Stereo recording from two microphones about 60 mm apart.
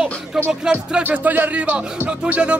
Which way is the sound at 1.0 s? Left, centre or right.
Right.